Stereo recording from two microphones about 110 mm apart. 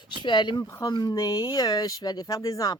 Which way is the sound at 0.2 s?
45° left (ahead or behind).